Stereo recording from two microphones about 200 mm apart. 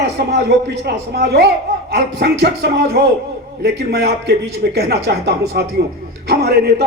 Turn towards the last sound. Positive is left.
turn(degrees=-50)  # may be behind; listen again after turning